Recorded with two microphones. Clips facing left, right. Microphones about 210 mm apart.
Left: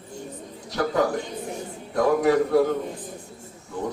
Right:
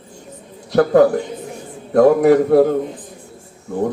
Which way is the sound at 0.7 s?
60° right (ahead or behind).